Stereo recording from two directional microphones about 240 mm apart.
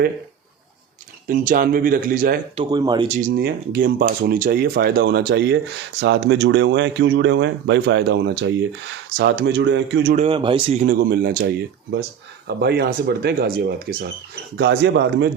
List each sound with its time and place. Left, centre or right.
1.3 s speech: right
2.6 s speech: centre
3.2 s speech: right
10.2 s speech: right
10.9 s speech: right
12.5 s speech: right